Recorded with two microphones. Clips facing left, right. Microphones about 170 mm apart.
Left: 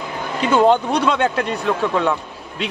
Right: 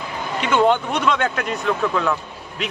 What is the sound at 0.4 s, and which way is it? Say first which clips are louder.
A man's voice: left 3 dB; 35° left (ahead or behind).